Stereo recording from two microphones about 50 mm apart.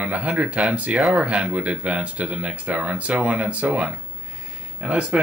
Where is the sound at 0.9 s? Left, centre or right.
Centre.